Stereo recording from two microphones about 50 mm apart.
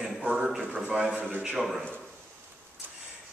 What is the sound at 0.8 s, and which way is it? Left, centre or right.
A man's voice, centre.